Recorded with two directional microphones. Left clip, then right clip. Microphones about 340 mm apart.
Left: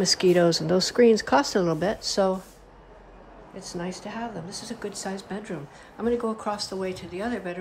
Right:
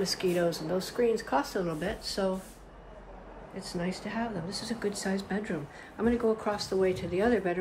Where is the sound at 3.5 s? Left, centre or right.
Centre.